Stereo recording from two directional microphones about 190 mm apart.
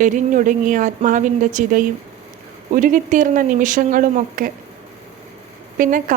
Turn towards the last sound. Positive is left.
turn(degrees=-45)  # may be behind; listen again after turning